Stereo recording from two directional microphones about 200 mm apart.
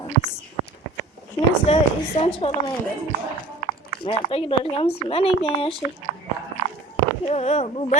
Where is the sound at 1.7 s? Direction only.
30° left (ahead or behind).